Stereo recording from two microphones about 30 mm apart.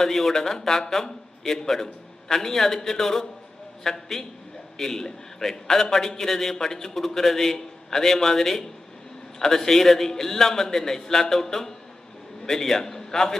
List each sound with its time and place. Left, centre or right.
0.0 s a man's voice: centre
0.3 s a man's voice: centre